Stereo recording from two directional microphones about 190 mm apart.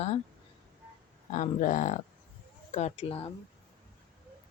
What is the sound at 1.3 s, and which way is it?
Speech, 40° left (ahead or behind).